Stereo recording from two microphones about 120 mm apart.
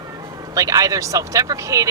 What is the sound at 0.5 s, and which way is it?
Speech, 30° right (ahead or behind).